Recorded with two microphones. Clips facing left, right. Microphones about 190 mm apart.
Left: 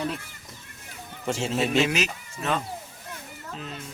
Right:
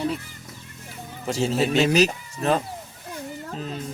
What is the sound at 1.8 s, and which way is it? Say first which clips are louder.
Speech: right 6 dB; 35° right (ahead or behind).